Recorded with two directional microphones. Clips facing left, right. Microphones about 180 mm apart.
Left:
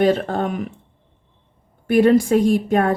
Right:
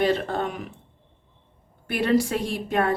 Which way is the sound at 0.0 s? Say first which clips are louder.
Left 5 dB; 45° left (ahead or behind).